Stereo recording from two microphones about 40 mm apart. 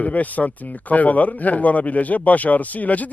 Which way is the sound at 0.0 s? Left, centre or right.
Left.